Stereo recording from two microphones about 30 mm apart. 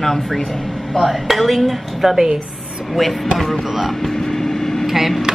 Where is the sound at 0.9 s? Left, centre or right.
Centre.